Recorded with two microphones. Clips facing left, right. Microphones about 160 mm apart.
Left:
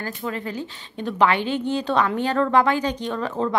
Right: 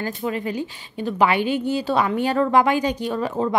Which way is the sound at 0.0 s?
15° right (ahead or behind).